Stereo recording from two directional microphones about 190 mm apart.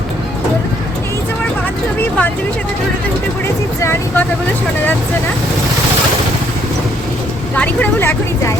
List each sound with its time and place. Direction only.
2.0 s speech: 10° left (ahead or behind)
3.8 s speech: 15° left (ahead or behind)
7.5 s speech: 10° left (ahead or behind)